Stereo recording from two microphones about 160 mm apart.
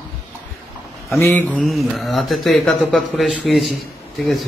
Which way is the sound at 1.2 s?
5° left (ahead or behind).